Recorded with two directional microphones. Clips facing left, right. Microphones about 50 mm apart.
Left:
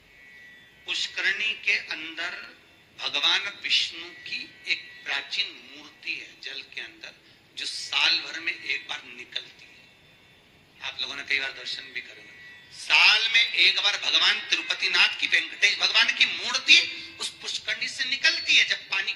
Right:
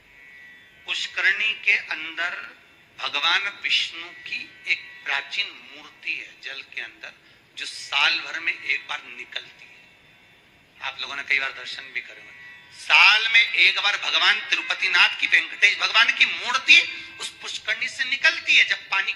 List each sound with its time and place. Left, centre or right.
0.9 s a man's voice: right
10.8 s a man's voice: right